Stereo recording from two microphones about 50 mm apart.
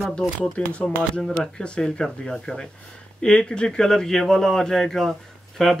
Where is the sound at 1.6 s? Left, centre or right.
Centre.